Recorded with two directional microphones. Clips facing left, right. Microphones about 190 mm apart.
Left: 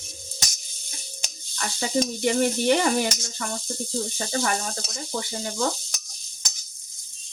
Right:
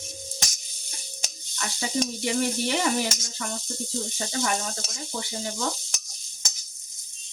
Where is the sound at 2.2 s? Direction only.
55° left (ahead or behind).